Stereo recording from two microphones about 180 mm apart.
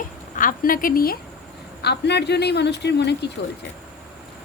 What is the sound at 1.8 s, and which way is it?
Speech, 65° left (ahead or behind).